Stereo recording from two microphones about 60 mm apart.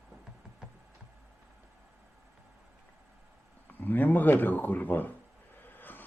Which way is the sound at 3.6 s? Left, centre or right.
Left.